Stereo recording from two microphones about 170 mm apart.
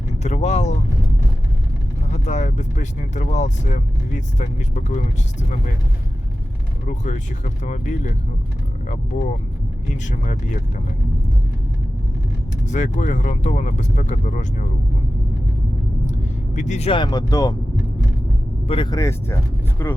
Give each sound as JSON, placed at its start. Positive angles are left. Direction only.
{"t": 0.2, "sound": "speech", "side_deg": 40}
{"t": 2.0, "sound": "speech", "side_deg": 45}
{"t": 6.8, "sound": "speech", "side_deg": 45}
{"t": 12.6, "sound": "speech", "side_deg": 45}
{"t": 16.0, "sound": "vehicle", "side_deg": 45}
{"t": 16.9, "sound": "speech", "side_deg": 25}
{"t": 18.7, "sound": "speech", "side_deg": 30}
{"t": 18.9, "sound": "speech", "side_deg": 15}